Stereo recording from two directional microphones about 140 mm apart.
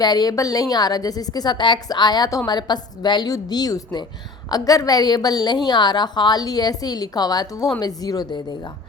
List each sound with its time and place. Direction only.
0.0 s a woman's voice: 30° left (ahead or behind)